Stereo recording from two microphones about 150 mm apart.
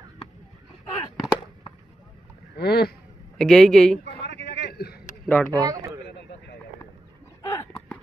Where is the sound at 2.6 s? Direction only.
90° left.